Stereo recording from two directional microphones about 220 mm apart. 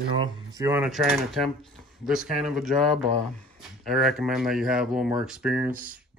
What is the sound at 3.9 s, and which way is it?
Speech, centre (ahead or behind).